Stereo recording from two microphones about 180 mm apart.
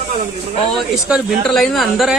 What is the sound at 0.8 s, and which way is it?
Speech, 5° right (ahead or behind).